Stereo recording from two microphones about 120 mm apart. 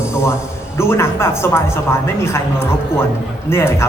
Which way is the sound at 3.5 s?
20° left (ahead or behind).